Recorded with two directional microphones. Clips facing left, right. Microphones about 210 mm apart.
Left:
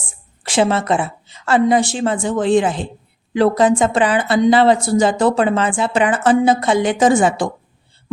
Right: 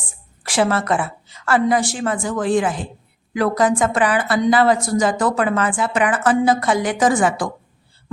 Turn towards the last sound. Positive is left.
turn(degrees=25)  # may be behind; listen again after turning